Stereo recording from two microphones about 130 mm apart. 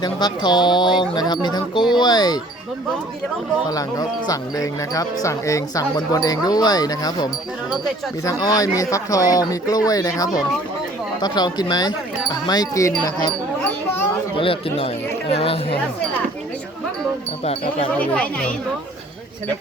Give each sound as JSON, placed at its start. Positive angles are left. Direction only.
{"t": 0.0, "sound": "speech", "side_deg": 35}
{"t": 3.7, "sound": "speech", "side_deg": 30}
{"t": 14.3, "sound": "speech", "side_deg": 45}
{"t": 17.4, "sound": "speech", "side_deg": 50}
{"t": 17.9, "sound": "speech", "side_deg": 10}